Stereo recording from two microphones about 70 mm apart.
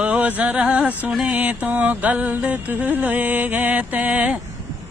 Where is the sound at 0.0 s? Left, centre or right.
Centre.